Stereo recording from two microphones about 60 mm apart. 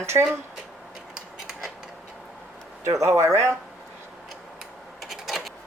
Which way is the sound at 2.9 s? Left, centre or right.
Right.